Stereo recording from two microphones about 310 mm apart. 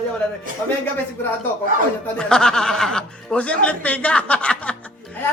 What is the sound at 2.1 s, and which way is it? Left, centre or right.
Speech, centre.